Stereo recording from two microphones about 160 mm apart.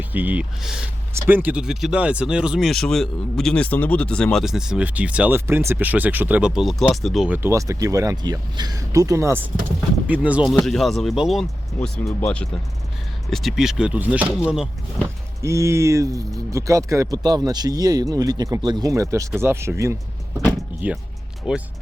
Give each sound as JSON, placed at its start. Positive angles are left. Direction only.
{"t": 0.1, "sound": "speech", "side_deg": -10}
{"t": 7.3, "sound": "speech", "side_deg": -15}
{"t": 12.0, "sound": "speech", "side_deg": 10}
{"t": 13.3, "sound": "speech", "side_deg": 0}
{"t": 15.0, "sound": "speech", "side_deg": -20}